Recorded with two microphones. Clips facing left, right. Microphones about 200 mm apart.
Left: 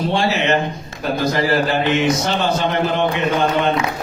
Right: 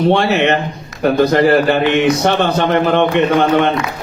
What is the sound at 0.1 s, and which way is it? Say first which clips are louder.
A man's voice: right 5 dB; 60° right (ahead or behind).